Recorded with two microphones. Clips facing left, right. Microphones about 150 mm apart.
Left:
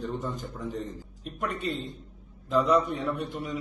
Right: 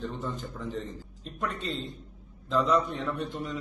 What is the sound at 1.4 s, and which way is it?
A man's voice, 10° left (ahead or behind).